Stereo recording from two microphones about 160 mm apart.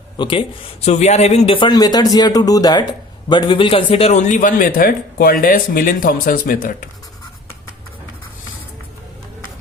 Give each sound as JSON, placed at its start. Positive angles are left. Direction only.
{"t": 0.2, "sound": "speech", "side_deg": 30}
{"t": 0.9, "sound": "a man's voice", "side_deg": 45}
{"t": 1.5, "sound": "a man's voice", "side_deg": 25}